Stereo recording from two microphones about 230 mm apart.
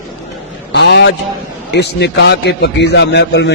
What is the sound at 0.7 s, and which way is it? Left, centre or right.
A man's voice, left.